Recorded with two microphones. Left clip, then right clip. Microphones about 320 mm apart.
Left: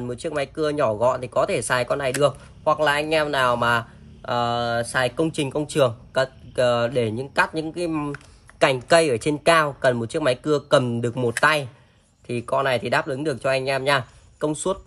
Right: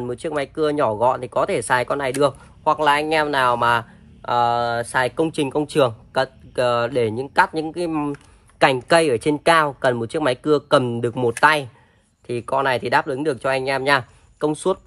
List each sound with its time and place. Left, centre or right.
0.0 s speech: centre